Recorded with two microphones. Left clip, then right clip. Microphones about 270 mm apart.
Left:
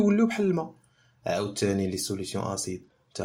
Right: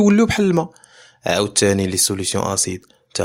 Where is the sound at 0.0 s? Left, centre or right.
Right.